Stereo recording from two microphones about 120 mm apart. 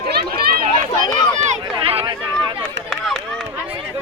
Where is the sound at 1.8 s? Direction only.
50° right (ahead or behind).